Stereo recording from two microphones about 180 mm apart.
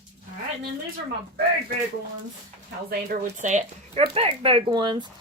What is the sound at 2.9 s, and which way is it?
Speech, 45° right (ahead or behind).